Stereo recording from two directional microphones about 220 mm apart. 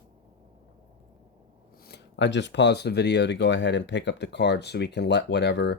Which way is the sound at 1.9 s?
55° left (ahead or behind).